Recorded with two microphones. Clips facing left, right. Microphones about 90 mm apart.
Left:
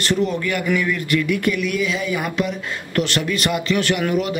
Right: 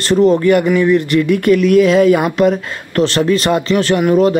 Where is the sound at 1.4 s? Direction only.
45° right (ahead or behind).